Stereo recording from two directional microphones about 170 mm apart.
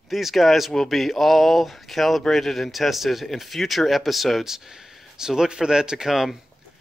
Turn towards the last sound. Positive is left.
turn(degrees=0)  # may be behind; listen again after turning